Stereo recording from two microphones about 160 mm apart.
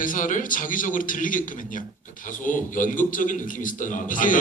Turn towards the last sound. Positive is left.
turn(degrees=55)  # may be behind; listen again after turning